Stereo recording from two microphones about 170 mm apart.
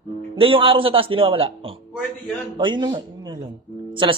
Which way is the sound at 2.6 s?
25° right (ahead or behind).